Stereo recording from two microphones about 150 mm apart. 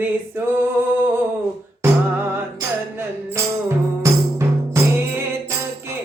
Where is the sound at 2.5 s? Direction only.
20° right (ahead or behind).